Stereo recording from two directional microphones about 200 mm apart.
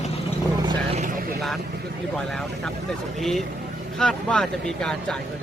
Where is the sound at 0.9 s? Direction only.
40° right (ahead or behind).